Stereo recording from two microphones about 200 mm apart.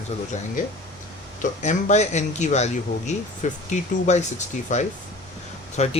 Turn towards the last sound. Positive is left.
turn(degrees=35)  # may be behind; listen again after turning